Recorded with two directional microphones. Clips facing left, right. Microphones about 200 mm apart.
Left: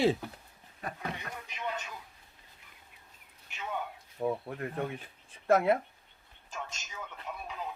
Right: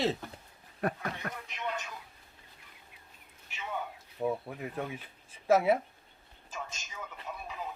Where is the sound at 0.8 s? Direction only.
60° right (ahead or behind).